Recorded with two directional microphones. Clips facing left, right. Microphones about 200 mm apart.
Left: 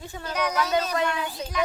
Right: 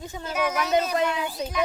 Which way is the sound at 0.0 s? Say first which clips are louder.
Right 2 dB; 20° right (ahead or behind).